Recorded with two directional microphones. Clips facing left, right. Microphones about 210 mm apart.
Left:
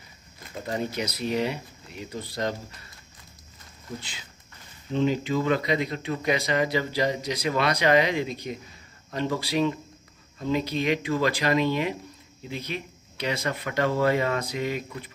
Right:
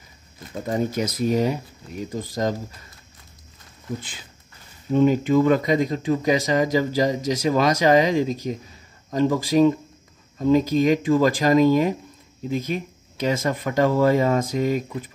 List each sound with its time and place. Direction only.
0.7 s speech: 45° right (ahead or behind)
4.9 s speech: 50° right (ahead or behind)